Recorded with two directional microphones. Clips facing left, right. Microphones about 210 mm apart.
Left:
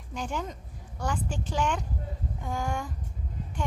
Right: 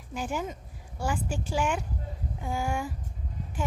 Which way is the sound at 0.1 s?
5° right (ahead or behind).